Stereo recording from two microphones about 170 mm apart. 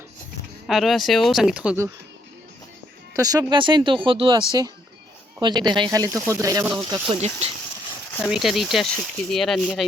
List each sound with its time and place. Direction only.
0.7 s speech: centre (ahead or behind)
3.2 s speech: 25° right (ahead or behind)
8.3 s speech: centre (ahead or behind)